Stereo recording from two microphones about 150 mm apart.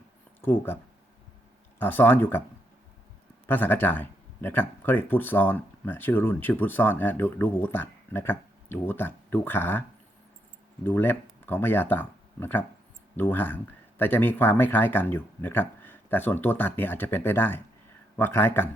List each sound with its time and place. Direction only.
0.4 s speech: 15° left (ahead or behind)
1.8 s speech: 15° left (ahead or behind)
3.4 s speech: 15° left (ahead or behind)
10.8 s speech: 15° left (ahead or behind)